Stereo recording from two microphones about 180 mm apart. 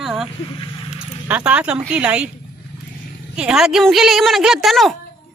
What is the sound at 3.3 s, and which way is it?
A man's voice, 5° right (ahead or behind).